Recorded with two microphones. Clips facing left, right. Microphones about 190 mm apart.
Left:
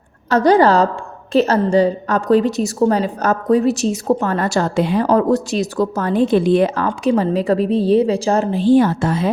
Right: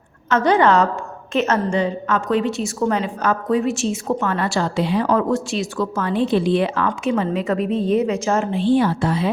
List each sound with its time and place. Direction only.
0.3 s a woman's voice: 35° left (ahead or behind)